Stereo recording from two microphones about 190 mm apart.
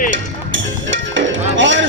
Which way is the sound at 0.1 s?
75° right (ahead or behind).